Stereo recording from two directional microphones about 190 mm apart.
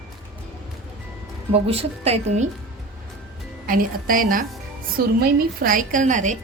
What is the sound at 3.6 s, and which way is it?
Speech, 45° right (ahead or behind).